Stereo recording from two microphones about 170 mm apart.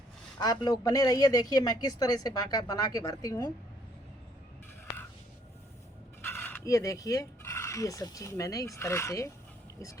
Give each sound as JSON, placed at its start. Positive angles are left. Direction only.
{"t": 0.3, "sound": "speech", "side_deg": 25}
{"t": 6.2, "sound": "speech", "side_deg": 10}